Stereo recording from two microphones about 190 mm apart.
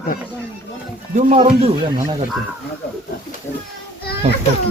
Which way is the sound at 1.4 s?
35° right (ahead or behind).